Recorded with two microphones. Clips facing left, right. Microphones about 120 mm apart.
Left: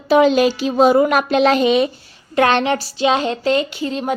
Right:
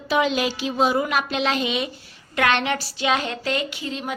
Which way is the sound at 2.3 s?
30° left (ahead or behind).